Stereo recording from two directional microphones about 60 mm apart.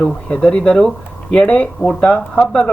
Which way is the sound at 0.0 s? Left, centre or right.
Left.